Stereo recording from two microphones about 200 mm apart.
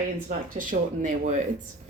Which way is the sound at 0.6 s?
40° right (ahead or behind).